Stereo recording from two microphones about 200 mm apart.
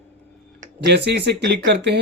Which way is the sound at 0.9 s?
55° right (ahead or behind).